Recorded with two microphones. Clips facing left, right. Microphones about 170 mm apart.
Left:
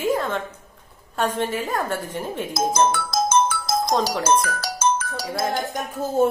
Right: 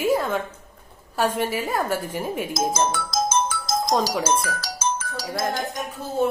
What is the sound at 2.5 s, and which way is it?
Music, 60° left (ahead or behind).